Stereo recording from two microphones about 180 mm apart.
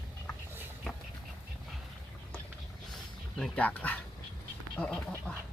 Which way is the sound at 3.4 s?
10° left (ahead or behind).